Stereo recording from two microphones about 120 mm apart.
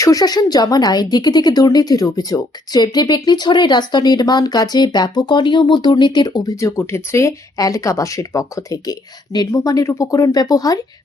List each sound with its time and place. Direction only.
0.0 s speech: 30° left (ahead or behind)